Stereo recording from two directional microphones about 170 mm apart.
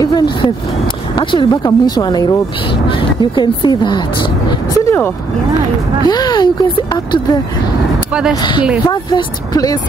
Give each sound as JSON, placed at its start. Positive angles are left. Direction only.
{"t": 0.0, "sound": "a sound", "side_deg": 25}
{"t": 1.1, "sound": "speech", "side_deg": 30}
{"t": 8.1, "sound": "speech", "side_deg": -5}
{"t": 8.4, "sound": "speech", "side_deg": 30}